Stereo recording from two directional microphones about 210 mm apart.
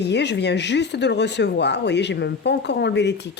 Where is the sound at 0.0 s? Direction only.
55° left (ahead or behind).